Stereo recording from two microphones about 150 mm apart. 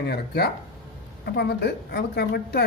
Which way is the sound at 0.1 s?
90° left.